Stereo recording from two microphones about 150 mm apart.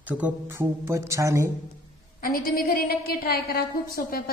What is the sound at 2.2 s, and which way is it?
A woman's voice, 75° left (ahead or behind).